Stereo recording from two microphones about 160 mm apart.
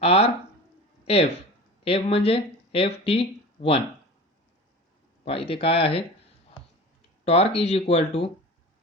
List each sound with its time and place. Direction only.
0.0 s speech: 35° left (ahead or behind)
5.2 s speech: 35° left (ahead or behind)
7.3 s speech: 40° left (ahead or behind)